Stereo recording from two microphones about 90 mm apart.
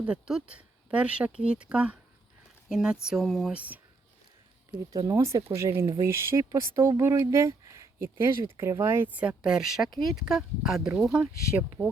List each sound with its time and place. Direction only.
0.0 s speech: 10° right (ahead or behind)
3.5 s speech: 15° right (ahead or behind)
5.0 s speech: 35° right (ahead or behind)
9.1 s speech: 10° right (ahead or behind)